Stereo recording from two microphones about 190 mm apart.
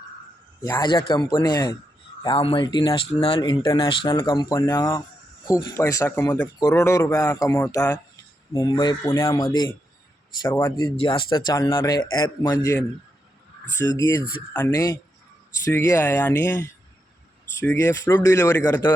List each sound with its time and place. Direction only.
0.6 s speech: 20° left (ahead or behind)
14.1 s speech: 10° left (ahead or behind)
17.7 s speech: 10° left (ahead or behind)